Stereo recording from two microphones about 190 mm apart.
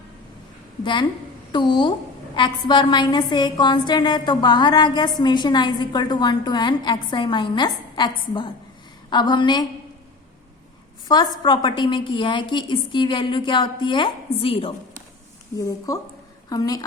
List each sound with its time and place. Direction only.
1.5 s a woman's voice: 25° left (ahead or behind)
11.1 s a woman's voice: 25° left (ahead or behind)
16.5 s a woman's voice: 20° left (ahead or behind)